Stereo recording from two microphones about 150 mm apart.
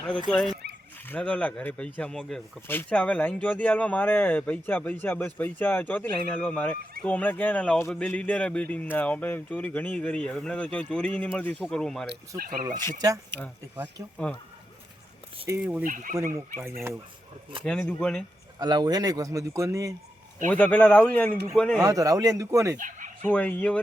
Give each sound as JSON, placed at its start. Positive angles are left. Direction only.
{"t": 0.3, "sound": "speech", "side_deg": 5}
{"t": 12.4, "sound": "speech", "side_deg": -70}
{"t": 13.0, "sound": "speech", "side_deg": -25}
{"t": 15.4, "sound": "speech", "side_deg": -15}
{"t": 15.8, "sound": "speech", "side_deg": -65}
{"t": 17.6, "sound": "speech", "side_deg": 5}
{"t": 18.6, "sound": "speech", "side_deg": -30}
{"t": 20.5, "sound": "speech", "side_deg": 10}
{"t": 21.8, "sound": "speech", "side_deg": -25}
{"t": 22.8, "sound": "fowl", "side_deg": -60}
{"t": 23.2, "sound": "speech", "side_deg": 10}